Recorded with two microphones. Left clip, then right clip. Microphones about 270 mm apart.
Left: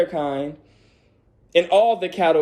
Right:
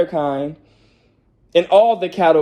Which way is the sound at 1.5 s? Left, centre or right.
Centre.